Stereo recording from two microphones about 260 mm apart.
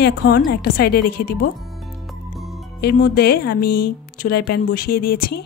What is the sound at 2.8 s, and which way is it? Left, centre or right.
Speech, left.